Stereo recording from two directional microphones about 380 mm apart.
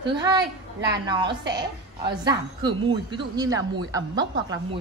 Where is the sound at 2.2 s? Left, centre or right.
Centre.